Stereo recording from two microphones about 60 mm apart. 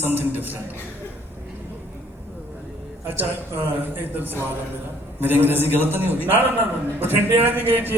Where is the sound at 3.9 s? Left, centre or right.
Right.